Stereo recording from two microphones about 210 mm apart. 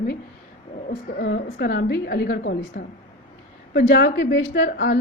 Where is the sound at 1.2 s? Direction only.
55° left (ahead or behind).